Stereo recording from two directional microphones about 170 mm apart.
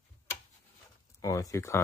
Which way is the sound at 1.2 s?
20° left (ahead or behind).